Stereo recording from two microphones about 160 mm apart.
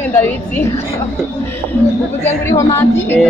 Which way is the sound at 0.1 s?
10° left (ahead or behind).